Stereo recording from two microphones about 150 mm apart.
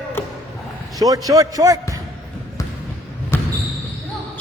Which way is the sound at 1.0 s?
25° right (ahead or behind).